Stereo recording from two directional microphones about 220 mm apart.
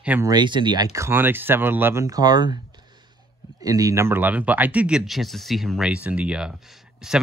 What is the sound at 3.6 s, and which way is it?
Speech, 15° right (ahead or behind).